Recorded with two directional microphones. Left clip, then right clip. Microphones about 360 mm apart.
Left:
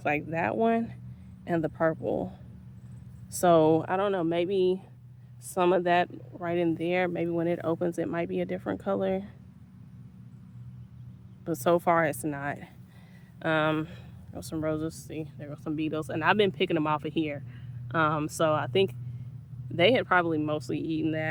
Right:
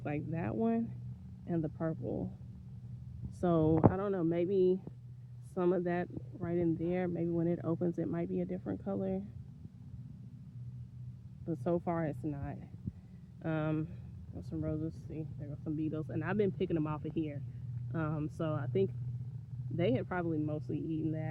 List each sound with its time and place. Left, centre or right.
0.3 s speech: centre
3.4 s speech: centre
11.4 s speech: centre
20.7 s speech: left